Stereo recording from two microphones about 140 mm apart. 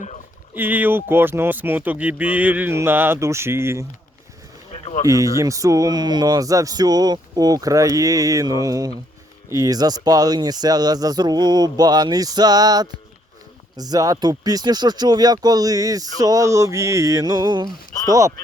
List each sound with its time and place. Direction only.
0.5 s speech: 15° right (ahead or behind)
4.7 s a sound: 50° left (ahead or behind)
5.0 s speech: 25° right (ahead or behind)